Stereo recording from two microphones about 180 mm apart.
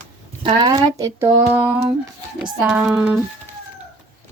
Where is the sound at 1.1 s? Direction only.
15° right (ahead or behind).